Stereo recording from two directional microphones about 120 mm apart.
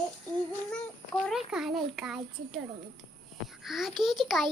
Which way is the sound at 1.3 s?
5° right (ahead or behind).